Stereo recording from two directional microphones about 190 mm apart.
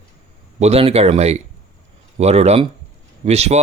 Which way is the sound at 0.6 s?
30° right (ahead or behind).